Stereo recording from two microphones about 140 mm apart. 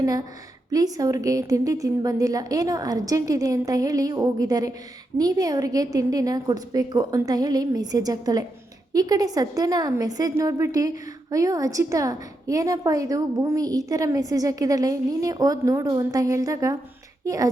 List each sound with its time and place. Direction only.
0.0 s a woman's voice: 25° right (ahead or behind)